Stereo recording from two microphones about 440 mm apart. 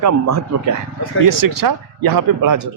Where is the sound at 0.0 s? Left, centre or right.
Right.